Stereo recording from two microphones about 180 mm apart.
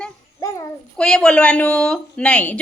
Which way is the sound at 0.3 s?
20° left (ahead or behind).